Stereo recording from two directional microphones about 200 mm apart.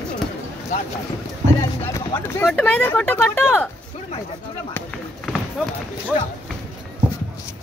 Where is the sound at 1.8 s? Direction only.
15° left (ahead or behind).